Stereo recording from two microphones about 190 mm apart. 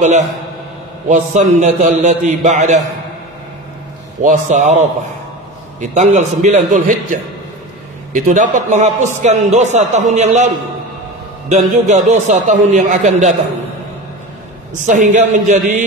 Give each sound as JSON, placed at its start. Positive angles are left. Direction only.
{"t": 1.0, "sound": "a man's voice", "side_deg": -40}
{"t": 4.2, "sound": "a man's voice", "side_deg": -40}
{"t": 8.1, "sound": "a man's voice", "side_deg": -40}
{"t": 14.9, "sound": "a man's voice", "side_deg": -40}